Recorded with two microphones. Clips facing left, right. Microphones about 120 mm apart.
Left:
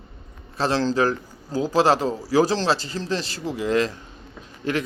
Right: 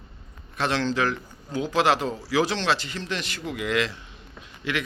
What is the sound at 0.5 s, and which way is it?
Speech, 35° left (ahead or behind).